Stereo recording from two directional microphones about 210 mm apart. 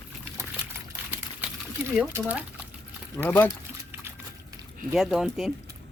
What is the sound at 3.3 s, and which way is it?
Speech, 10° left (ahead or behind).